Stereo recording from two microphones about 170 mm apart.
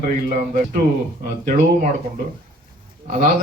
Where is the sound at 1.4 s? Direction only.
50° right (ahead or behind).